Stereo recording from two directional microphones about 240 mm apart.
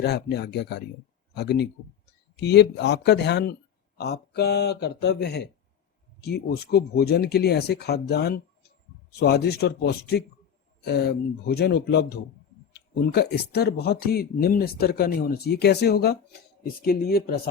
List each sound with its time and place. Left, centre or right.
0.0 s speech: left